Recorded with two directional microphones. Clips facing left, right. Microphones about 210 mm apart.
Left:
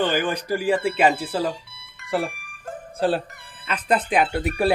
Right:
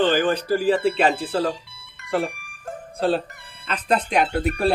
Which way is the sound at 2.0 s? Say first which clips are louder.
Right 1 dB; centre (ahead or behind).